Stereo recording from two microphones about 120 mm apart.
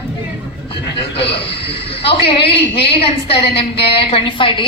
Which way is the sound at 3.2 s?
50° left (ahead or behind).